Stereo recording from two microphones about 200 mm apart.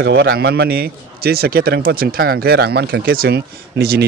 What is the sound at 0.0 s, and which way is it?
A man's voice, 55° right (ahead or behind).